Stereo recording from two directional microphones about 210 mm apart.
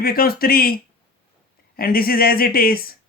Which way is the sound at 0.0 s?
45° left (ahead or behind).